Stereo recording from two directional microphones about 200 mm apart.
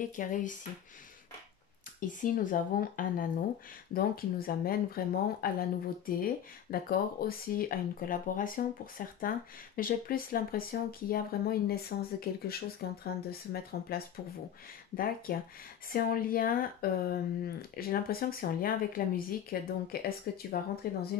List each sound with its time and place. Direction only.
0.1 s speech: 40° left (ahead or behind)
2.0 s speech: 40° left (ahead or behind)